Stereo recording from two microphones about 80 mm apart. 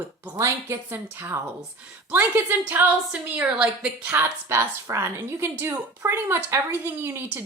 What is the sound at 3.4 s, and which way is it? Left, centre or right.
Speech, centre.